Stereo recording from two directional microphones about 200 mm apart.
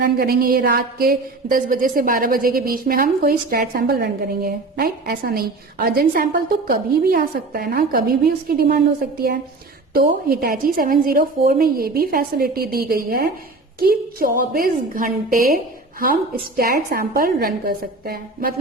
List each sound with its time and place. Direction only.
0.0 s a woman's voice: 50° right (ahead or behind)
9.9 s a woman's voice: 45° right (ahead or behind)